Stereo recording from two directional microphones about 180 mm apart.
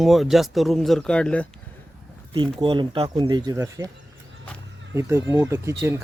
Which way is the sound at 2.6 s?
25° right (ahead or behind).